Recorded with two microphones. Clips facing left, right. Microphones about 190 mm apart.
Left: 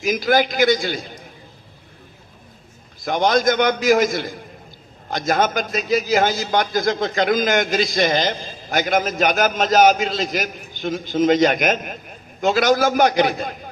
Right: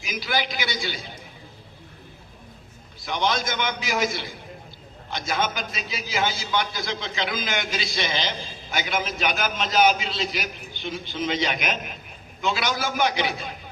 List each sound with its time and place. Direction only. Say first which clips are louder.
0.0 s a man's voice: left 10 dB; 45° left (ahead or behind)
3.0 s a man's voice: left 8 dB; 45° left (ahead or behind)